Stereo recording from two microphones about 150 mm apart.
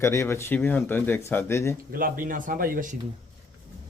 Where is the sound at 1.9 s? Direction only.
70° right (ahead or behind).